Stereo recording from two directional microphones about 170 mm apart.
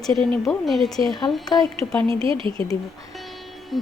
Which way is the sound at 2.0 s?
30° right (ahead or behind).